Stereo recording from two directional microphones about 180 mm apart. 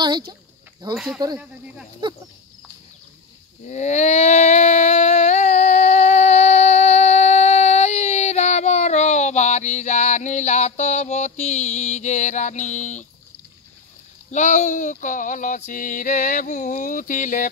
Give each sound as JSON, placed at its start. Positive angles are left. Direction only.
{"t": 0.9, "sound": "speech", "side_deg": 0}
{"t": 3.6, "sound": "a sound", "side_deg": 40}
{"t": 14.3, "sound": "music", "side_deg": 40}